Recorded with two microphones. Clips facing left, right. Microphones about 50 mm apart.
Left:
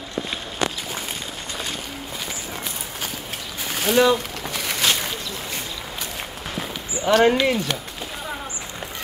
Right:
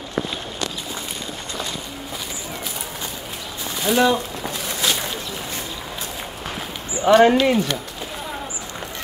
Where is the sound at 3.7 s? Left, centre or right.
Left.